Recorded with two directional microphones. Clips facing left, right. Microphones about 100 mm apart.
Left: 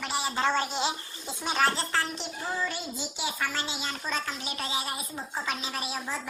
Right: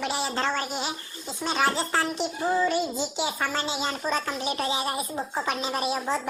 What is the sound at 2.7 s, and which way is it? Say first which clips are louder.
A child's voice: right 10 dB; 25° right (ahead or behind).